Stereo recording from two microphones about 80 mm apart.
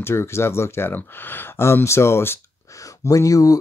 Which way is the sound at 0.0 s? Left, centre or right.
Left.